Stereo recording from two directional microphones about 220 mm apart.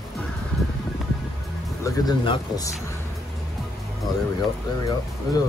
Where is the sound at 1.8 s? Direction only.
20° left (ahead or behind).